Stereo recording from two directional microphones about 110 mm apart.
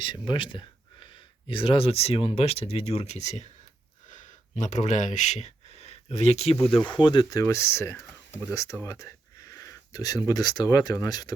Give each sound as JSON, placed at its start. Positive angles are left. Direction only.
{"t": 0.0, "sound": "speech", "side_deg": 45}
{"t": 4.5, "sound": "speech", "side_deg": 90}
{"t": 6.7, "sound": "speech", "side_deg": 50}
{"t": 7.4, "sound": "speech", "side_deg": 25}